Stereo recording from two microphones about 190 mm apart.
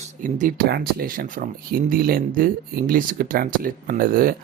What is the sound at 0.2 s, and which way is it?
Speech, 45° right (ahead or behind).